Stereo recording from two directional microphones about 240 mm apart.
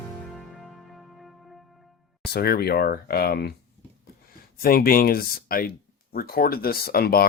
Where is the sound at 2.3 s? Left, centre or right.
Left.